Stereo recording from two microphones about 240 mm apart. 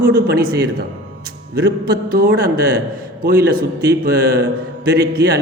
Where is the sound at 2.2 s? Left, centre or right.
Right.